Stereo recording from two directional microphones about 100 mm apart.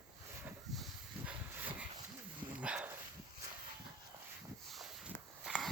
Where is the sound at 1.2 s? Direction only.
20° right (ahead or behind).